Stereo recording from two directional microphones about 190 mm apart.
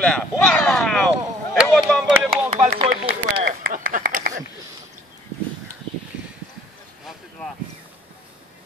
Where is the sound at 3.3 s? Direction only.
50° right (ahead or behind).